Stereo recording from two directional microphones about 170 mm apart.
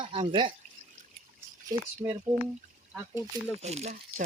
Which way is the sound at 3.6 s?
40° right (ahead or behind).